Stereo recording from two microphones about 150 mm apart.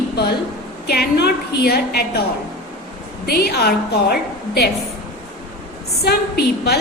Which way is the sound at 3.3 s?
90° left.